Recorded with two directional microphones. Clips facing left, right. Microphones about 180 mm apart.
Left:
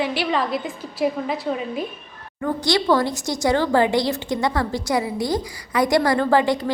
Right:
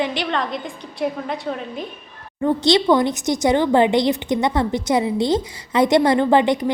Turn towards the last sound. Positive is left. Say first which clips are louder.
# right 2 dB
turn(degrees=-20)  # may be behind; listen again after turning